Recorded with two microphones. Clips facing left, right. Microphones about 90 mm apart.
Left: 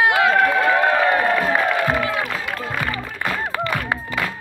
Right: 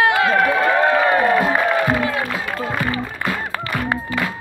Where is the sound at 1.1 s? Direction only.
15° right (ahead or behind).